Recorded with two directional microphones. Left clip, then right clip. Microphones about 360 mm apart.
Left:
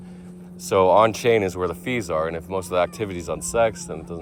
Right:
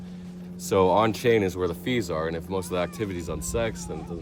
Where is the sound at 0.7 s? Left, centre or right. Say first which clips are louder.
Left 5 dB; centre.